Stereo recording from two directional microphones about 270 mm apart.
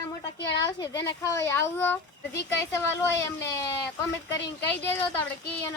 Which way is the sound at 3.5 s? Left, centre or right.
Centre.